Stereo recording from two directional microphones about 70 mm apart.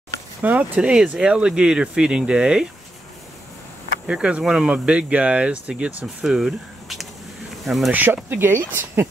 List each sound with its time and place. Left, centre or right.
0.4 s speech: right
4.1 s speech: centre
6.2 s speech: centre
7.9 s speech: right